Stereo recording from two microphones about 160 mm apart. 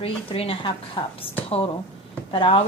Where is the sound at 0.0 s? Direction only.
35° left (ahead or behind).